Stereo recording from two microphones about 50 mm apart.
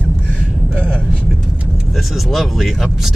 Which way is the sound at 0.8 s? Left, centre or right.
Left.